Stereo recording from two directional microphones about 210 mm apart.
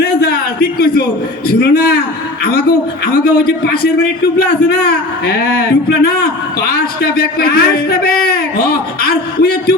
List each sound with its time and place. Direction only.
1.5 s a man's voice: 45° left (ahead or behind)